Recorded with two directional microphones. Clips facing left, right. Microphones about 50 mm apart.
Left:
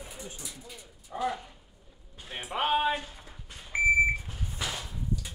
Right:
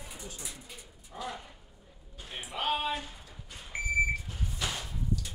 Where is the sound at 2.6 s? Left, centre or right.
Left.